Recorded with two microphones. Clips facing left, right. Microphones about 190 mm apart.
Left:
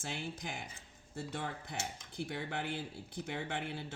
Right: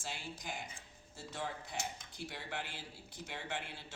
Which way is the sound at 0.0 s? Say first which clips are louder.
Left 4 dB; 55° left (ahead or behind).